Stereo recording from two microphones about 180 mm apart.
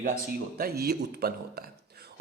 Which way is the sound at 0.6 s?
60° right (ahead or behind).